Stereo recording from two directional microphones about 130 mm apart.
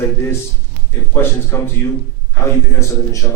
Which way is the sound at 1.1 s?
20° left (ahead or behind).